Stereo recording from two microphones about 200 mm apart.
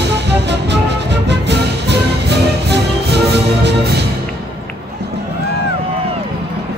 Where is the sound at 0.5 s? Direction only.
60° right (ahead or behind).